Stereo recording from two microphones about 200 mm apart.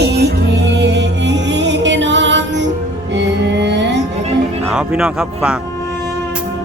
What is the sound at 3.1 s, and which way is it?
Mantra, 60° right (ahead or behind).